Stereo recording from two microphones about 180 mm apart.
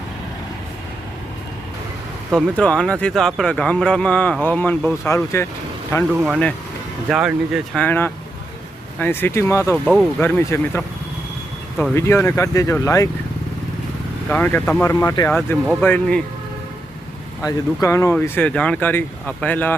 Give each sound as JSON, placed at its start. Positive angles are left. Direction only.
{"t": 2.3, "sound": "speech", "side_deg": 5}
{"t": 6.1, "sound": "speech", "side_deg": -10}
{"t": 7.8, "sound": "speech", "side_deg": 10}
{"t": 9.8, "sound": "speech", "side_deg": 0}
{"t": 10.2, "sound": "speech", "side_deg": 10}
{"t": 14.3, "sound": "speech", "side_deg": 10}
{"t": 14.8, "sound": "speech", "side_deg": 20}
{"t": 17.4, "sound": "speech", "side_deg": 15}